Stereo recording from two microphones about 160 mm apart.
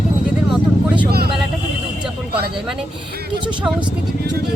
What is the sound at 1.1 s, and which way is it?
Vehicle, 80° right.